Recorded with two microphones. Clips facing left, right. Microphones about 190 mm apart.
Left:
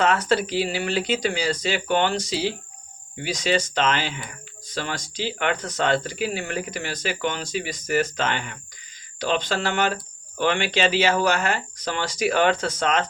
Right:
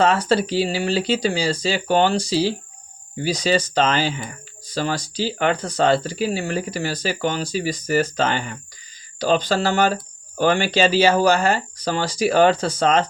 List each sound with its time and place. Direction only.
0.0 s speech: 30° right (ahead or behind)